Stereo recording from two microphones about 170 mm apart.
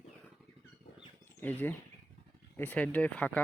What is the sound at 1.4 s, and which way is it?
Speech, 10° left (ahead or behind).